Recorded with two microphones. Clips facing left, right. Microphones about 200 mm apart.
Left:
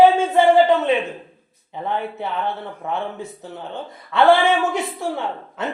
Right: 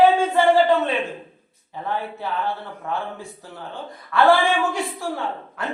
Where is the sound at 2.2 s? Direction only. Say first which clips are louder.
Left 1 dB; 20° left (ahead or behind).